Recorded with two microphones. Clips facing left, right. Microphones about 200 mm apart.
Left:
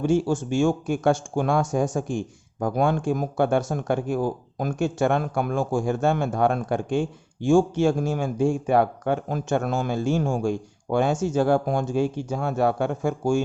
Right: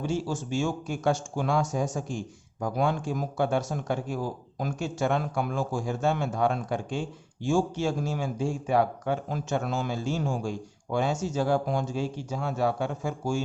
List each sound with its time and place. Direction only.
0.0 s speech: 55° left (ahead or behind)